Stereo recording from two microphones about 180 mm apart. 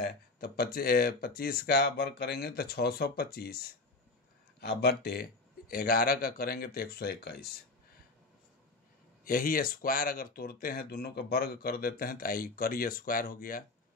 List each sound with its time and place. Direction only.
0.0 s speech: 55° left (ahead or behind)
9.2 s speech: 50° left (ahead or behind)